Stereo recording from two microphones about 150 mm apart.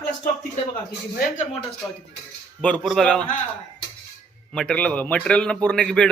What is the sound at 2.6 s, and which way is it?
Speech, 10° left (ahead or behind).